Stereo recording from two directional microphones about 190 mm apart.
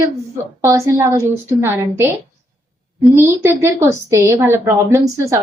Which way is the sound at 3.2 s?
15° right (ahead or behind).